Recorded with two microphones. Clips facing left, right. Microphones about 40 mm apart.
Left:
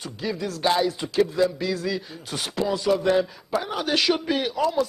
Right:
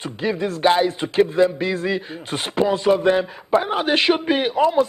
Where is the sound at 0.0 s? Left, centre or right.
Right.